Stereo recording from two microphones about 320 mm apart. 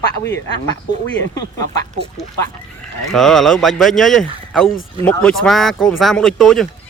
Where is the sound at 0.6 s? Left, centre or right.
Centre.